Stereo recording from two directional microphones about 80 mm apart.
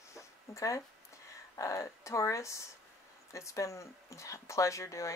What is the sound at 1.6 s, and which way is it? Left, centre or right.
Speech, left.